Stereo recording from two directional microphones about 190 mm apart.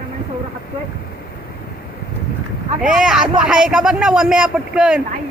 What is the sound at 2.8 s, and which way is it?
Speech, 5° right (ahead or behind).